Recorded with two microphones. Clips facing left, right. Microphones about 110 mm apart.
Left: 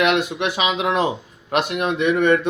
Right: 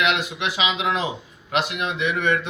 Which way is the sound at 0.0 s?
50° left (ahead or behind).